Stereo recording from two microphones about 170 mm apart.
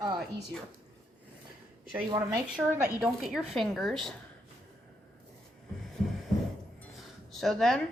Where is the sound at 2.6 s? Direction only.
10° right (ahead or behind).